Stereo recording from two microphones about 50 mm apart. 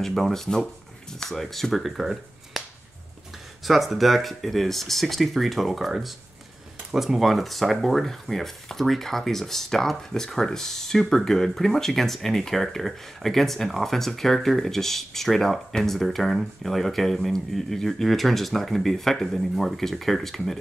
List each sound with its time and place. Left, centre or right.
0.0 s speech: centre
3.6 s speech: centre